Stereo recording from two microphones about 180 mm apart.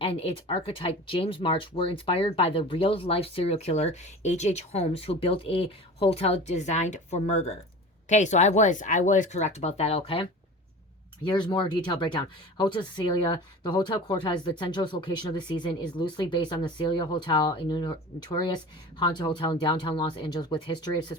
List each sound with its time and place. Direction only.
0.0 s speech: 30° left (ahead or behind)